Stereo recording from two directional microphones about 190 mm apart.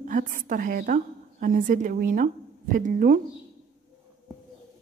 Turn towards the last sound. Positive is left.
turn(degrees=-45)  # may be behind; listen again after turning